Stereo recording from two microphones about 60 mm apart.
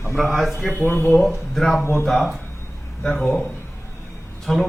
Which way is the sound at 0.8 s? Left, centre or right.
Left.